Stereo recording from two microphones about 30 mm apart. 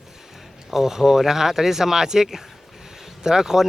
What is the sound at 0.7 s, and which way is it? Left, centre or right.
A man's voice, centre.